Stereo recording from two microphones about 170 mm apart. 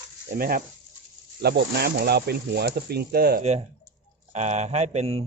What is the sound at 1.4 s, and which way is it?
Speech, 70° right (ahead or behind).